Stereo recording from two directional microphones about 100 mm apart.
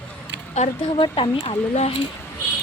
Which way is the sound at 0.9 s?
60° left (ahead or behind).